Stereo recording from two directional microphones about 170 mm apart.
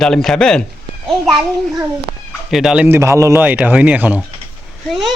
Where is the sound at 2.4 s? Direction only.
Centre (ahead or behind).